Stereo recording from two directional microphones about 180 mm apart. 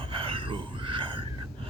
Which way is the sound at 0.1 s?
30° right (ahead or behind).